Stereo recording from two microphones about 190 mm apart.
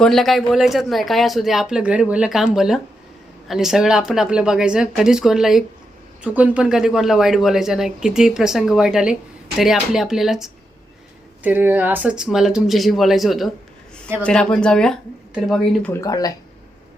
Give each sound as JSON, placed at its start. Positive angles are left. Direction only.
{"t": 0.0, "sound": "speech", "side_deg": 0}
{"t": 15.9, "sound": "speech", "side_deg": 15}